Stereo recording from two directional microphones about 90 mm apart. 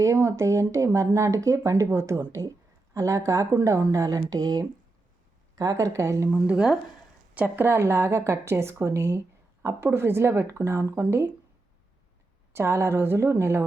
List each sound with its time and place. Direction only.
0.0 s speech: 35° right (ahead or behind)
6.2 s a woman's voice: 15° right (ahead or behind)
7.3 s speech: 20° right (ahead or behind)
12.5 s speech: 30° right (ahead or behind)